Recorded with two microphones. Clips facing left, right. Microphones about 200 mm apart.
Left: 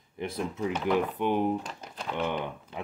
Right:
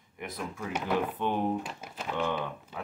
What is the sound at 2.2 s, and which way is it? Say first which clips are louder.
Speech: left 1 dB; 15° left (ahead or behind).